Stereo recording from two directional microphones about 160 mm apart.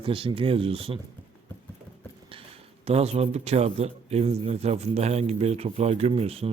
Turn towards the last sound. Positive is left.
turn(degrees=-40)  # may be behind; listen again after turning